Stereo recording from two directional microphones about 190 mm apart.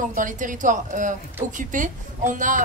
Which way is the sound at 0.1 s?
45° right (ahead or behind).